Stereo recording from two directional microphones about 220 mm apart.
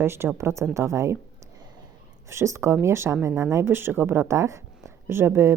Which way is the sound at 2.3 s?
10° right (ahead or behind).